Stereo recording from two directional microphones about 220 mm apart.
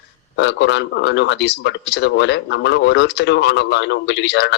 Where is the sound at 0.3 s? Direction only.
50° left (ahead or behind).